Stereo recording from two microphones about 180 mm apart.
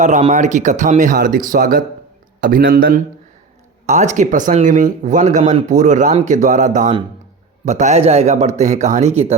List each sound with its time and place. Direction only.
0.0 s a man's voice: 40° right (ahead or behind)
3.8 s speech: 40° right (ahead or behind)